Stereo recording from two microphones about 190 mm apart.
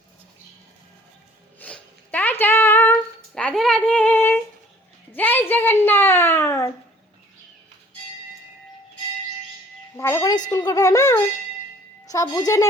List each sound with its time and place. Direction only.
1.5 s a sound: 10° left (ahead or behind)
10.0 s wind chime: 15° left (ahead or behind)
10.5 s speech: 15° left (ahead or behind)